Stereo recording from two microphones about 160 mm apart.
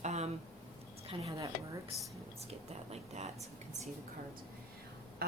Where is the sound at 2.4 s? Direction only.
40° right (ahead or behind).